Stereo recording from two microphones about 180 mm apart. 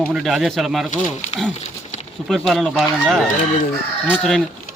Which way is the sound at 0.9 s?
40° left (ahead or behind).